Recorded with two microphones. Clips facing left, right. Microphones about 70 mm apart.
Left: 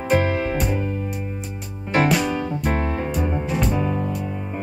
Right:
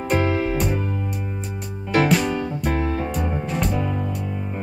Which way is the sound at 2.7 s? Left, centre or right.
Left.